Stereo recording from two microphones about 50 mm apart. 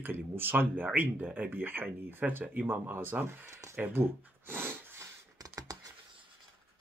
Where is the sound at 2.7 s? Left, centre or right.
Right.